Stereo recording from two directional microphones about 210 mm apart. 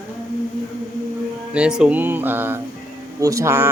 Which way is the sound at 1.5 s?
5° right (ahead or behind).